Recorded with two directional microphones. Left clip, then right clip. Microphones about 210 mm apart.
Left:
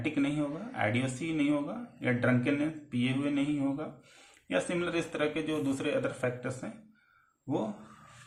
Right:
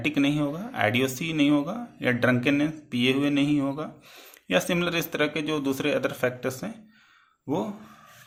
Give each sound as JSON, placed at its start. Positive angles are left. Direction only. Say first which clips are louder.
{"t": 0.0, "sound": "speech", "louder": "right 7 dB", "side_deg": -45}